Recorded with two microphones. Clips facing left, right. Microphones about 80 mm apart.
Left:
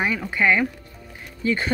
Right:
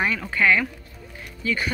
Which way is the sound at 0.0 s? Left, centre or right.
Centre.